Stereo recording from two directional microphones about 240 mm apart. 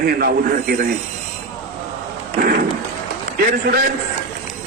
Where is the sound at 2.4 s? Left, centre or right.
Right.